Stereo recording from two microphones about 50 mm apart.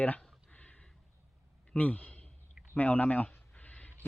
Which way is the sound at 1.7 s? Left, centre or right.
Left.